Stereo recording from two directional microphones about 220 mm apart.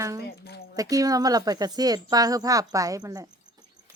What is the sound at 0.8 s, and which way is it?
Speech, 15° right (ahead or behind).